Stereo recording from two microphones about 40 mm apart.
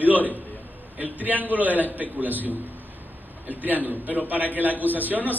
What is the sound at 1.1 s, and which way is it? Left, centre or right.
A man's voice, right.